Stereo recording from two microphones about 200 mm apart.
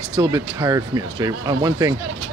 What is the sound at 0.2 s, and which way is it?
Speech, 20° right (ahead or behind).